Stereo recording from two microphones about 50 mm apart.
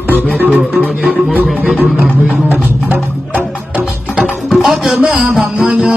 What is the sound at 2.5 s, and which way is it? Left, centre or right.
Music, right.